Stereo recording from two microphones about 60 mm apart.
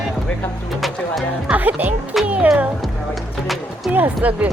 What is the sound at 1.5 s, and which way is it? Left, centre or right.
Speech, right.